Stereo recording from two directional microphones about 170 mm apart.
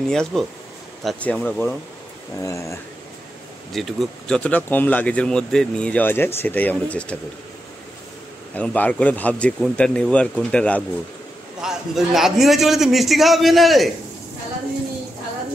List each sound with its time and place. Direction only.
0.1 s a man's voice: centre (ahead or behind)
2.4 s speech: 15° left (ahead or behind)
3.7 s speech: centre (ahead or behind)
8.5 s a man's voice: 10° left (ahead or behind)